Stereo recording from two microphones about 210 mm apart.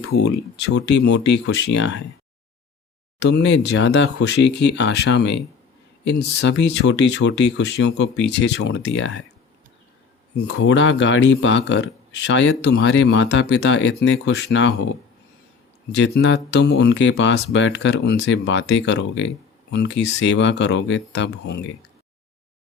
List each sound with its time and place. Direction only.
0.1 s speech: 55° left (ahead or behind)
3.2 s speech: 55° left (ahead or behind)
10.3 s speech: 90° left; by 14.9 s 70° left (ahead or behind)
15.9 s speech: 55° left (ahead or behind)